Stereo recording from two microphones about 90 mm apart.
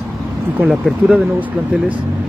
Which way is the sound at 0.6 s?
5° right (ahead or behind).